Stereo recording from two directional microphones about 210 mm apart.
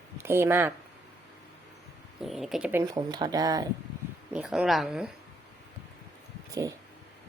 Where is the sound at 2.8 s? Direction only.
20° right (ahead or behind).